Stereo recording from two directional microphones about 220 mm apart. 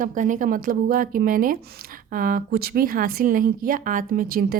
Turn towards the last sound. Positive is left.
turn(degrees=-40)  # may be behind; listen again after turning